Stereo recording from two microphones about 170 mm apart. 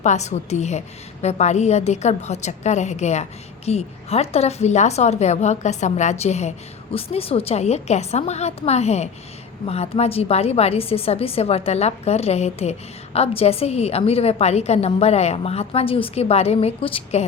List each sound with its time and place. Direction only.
0.0 s a woman's voice: 40° left (ahead or behind)